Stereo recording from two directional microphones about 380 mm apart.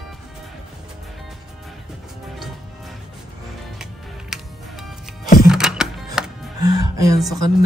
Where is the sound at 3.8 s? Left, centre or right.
Centre.